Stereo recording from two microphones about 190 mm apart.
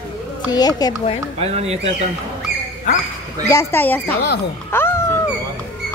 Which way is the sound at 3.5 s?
10° left (ahead or behind).